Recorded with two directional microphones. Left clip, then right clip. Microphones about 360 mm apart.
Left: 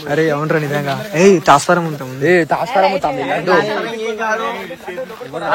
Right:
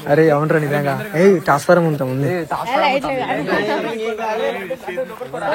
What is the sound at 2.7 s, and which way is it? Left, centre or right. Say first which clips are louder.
Speech: left 1 dB; right.